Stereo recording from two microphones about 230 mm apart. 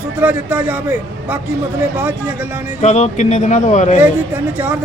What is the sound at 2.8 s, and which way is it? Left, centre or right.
Speech, left.